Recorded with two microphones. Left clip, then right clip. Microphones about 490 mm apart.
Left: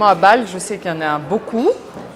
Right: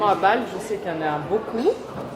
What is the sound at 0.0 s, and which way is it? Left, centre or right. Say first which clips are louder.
Speech: left 8 dB; left.